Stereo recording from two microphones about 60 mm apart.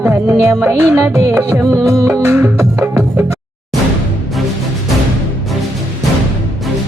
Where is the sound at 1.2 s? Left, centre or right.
Right.